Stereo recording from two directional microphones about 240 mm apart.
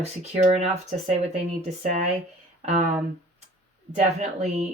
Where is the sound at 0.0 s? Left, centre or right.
Right.